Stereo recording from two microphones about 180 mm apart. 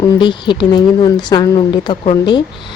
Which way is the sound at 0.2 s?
25° left (ahead or behind).